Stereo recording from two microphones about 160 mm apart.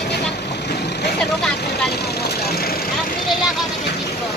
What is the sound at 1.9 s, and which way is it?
Vehicle, 85° left.